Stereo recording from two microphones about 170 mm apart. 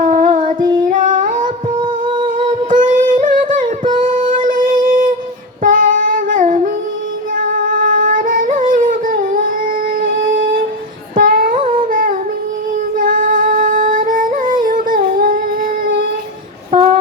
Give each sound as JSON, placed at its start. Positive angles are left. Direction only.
{"t": 0.0, "sound": "child singing", "side_deg": -50}
{"t": 0.9, "sound": "a sound", "side_deg": -50}
{"t": 1.8, "sound": "music", "side_deg": -25}
{"t": 2.6, "sound": "a sound", "side_deg": -50}
{"t": 4.4, "sound": "music", "side_deg": -55}
{"t": 11.1, "sound": "humming", "side_deg": -55}
{"t": 13.0, "sound": "singing", "side_deg": -55}
{"t": 14.6, "sound": "humming", "side_deg": -55}